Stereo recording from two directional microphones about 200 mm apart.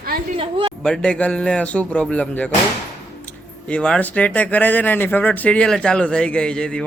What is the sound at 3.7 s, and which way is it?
Speech, 5° left (ahead or behind).